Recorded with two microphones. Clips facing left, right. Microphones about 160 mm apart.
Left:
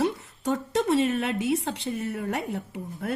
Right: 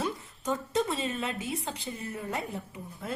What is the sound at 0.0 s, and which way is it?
A woman's voice, 75° left (ahead or behind).